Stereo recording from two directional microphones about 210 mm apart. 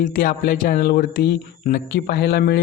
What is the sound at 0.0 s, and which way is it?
Speech, 40° left (ahead or behind).